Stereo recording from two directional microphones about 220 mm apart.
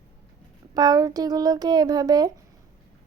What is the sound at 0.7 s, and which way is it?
Speech, 15° right (ahead or behind).